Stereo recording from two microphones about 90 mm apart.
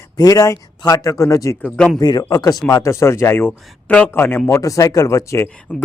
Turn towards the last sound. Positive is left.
turn(degrees=20)  # may be behind; listen again after turning